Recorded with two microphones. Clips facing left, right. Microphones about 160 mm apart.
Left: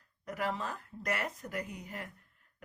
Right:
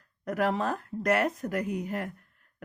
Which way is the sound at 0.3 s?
65° right (ahead or behind).